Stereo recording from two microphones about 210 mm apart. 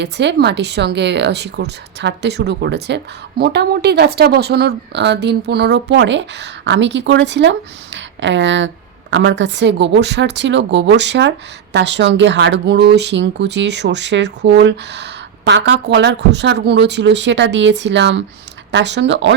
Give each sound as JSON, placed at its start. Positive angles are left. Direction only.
{"t": 0.0, "sound": "a woman's voice", "side_deg": -55}